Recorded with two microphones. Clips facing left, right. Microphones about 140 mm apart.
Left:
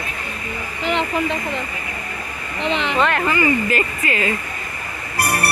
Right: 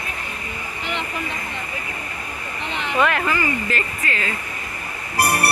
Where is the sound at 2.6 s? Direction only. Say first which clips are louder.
Left 7 dB; 90° left.